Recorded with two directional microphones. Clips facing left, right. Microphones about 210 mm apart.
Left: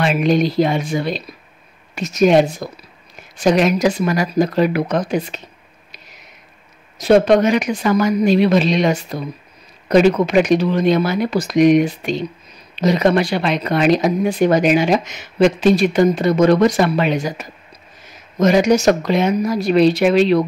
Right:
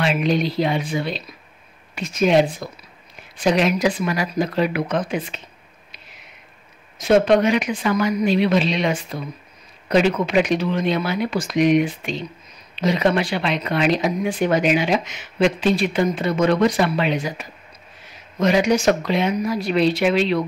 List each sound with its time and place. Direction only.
0.0 s speech: 45° left (ahead or behind)
7.0 s speech: 35° left (ahead or behind)